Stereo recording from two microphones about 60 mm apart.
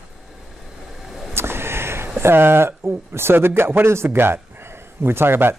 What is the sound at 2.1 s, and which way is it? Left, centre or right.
A man's voice, right.